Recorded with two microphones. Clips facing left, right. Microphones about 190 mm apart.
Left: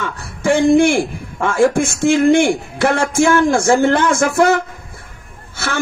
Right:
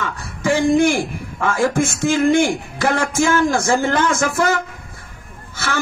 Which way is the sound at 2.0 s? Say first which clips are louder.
Left 4 dB; 65° left (ahead or behind).